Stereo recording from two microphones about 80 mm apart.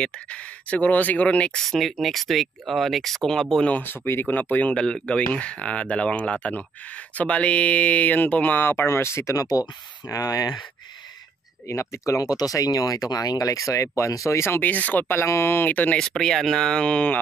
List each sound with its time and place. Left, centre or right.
0.0 s speech: centre
3.6 s speech: left
11.6 s speech: left; by 16.1 s centre
16.2 s speech: centre